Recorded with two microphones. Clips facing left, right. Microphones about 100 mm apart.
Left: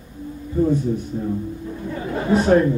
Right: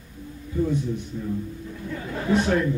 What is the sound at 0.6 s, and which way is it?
Speech, 40° left (ahead or behind).